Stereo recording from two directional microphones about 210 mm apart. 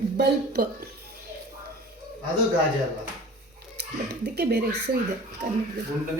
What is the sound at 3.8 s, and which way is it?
Speech, 50° right (ahead or behind).